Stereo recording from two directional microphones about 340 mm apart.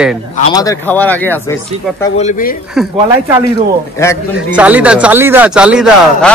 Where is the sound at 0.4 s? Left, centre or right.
Centre.